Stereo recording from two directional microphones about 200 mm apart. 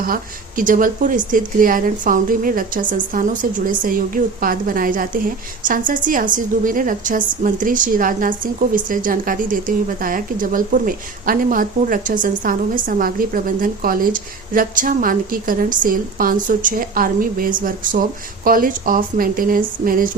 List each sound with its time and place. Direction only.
0.0 s a woman's voice: 45° right (ahead or behind)